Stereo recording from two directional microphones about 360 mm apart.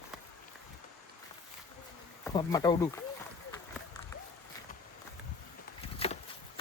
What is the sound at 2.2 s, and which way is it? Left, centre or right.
Speech, centre.